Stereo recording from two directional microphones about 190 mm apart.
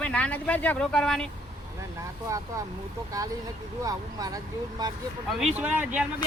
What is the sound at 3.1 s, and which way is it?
Speech, 15° right (ahead or behind).